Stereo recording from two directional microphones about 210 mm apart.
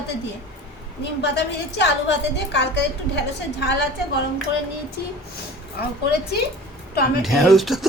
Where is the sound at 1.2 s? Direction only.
55° left (ahead or behind).